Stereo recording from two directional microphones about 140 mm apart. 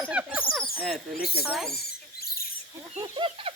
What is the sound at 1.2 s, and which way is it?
Speech, 90° left.